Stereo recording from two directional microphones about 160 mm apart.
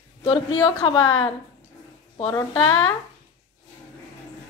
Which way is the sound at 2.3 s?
25° left (ahead or behind).